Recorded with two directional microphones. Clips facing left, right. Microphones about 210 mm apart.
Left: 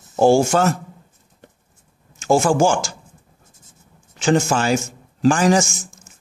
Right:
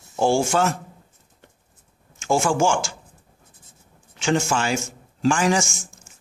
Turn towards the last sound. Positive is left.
turn(degrees=40)  # may be behind; listen again after turning